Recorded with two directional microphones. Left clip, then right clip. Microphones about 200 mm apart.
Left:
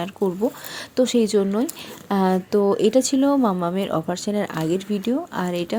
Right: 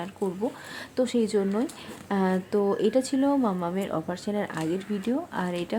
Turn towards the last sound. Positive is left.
turn(degrees=20)  # may be behind; listen again after turning